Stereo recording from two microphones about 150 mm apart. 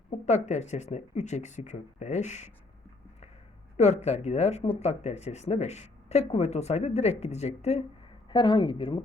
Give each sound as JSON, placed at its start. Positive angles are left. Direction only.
{"t": 0.3, "sound": "speech", "side_deg": 50}
{"t": 3.8, "sound": "speech", "side_deg": 45}
{"t": 8.3, "sound": "speech", "side_deg": 30}